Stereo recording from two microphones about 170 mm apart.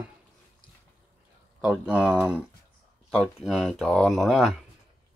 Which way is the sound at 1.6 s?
5° right (ahead or behind).